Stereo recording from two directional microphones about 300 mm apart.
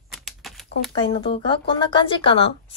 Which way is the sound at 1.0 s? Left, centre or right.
Centre.